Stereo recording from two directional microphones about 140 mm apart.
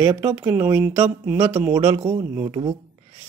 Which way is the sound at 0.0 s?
25° right (ahead or behind).